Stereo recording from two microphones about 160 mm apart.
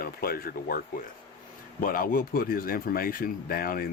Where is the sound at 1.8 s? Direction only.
60° left (ahead or behind).